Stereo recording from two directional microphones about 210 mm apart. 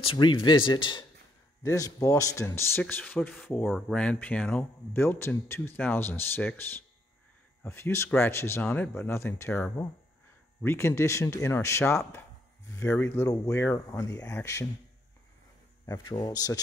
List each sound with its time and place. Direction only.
0.0 s speech: 25° left (ahead or behind)
15.9 s speech: 20° left (ahead or behind)